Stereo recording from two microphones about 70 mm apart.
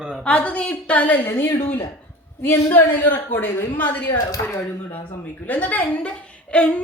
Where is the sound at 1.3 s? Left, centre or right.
Left.